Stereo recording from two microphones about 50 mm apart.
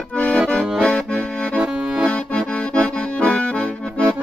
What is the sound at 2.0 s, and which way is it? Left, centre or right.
Accordion, left.